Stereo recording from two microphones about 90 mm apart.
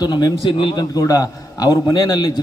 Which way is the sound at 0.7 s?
40° left (ahead or behind).